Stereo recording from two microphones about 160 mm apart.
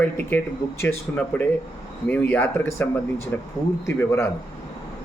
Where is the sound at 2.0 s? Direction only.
10° left (ahead or behind).